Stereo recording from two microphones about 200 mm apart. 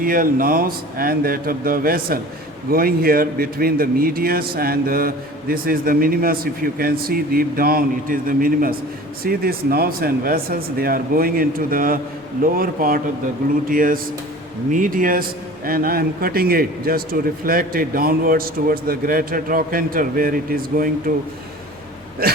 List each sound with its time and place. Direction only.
0.0 s a man's voice: 45° right (ahead or behind)
22.2 s a man's voice: 50° right (ahead or behind)